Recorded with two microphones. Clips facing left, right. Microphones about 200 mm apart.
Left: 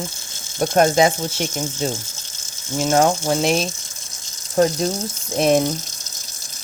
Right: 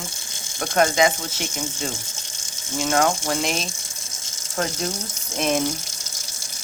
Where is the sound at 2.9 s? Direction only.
30° left (ahead or behind).